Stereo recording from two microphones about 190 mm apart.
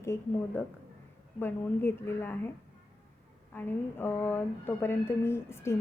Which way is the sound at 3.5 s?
10° left (ahead or behind).